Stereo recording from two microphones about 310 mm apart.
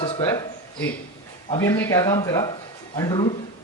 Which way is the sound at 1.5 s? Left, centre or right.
Centre.